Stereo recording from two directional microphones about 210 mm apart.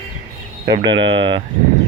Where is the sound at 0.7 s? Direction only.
25° right (ahead or behind).